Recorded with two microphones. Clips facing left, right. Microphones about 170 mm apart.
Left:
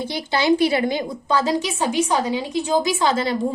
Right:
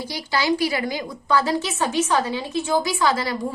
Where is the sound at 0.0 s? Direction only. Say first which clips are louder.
Left 3 dB; 25° left (ahead or behind).